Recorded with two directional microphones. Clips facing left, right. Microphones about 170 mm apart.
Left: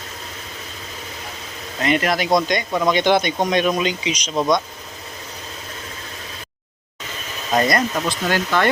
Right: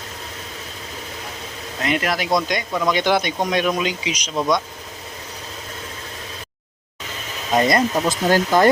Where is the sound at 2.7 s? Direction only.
15° left (ahead or behind).